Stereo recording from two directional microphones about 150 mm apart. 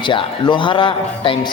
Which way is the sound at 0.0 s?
30° left (ahead or behind).